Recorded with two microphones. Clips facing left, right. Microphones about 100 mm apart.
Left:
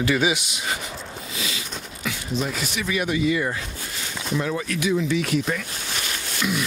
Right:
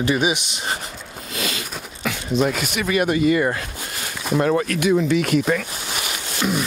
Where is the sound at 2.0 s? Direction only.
65° right (ahead or behind).